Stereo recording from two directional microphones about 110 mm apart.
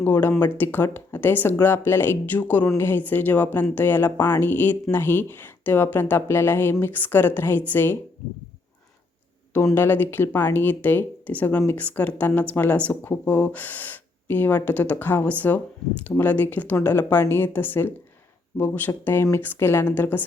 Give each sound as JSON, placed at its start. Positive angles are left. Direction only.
{"t": 0.0, "sound": "speech", "side_deg": 20}
{"t": 9.7, "sound": "speech", "side_deg": 20}